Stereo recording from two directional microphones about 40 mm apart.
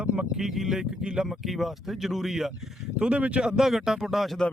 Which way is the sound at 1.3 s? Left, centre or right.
Centre.